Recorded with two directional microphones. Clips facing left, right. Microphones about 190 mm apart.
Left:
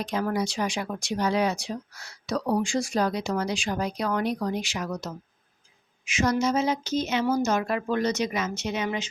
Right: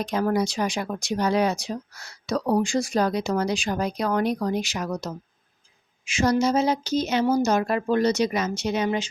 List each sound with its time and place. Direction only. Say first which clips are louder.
0.0 s speech: right 4 dB; 40° right (ahead or behind)